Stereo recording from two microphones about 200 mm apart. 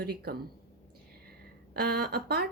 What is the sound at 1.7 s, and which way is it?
Speech, 50° right (ahead or behind).